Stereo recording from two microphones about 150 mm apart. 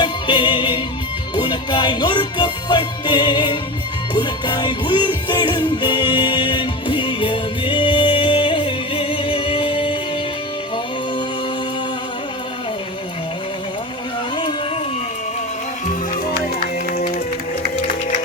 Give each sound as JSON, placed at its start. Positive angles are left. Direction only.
{"t": 0.0, "sound": "music", "side_deg": 35}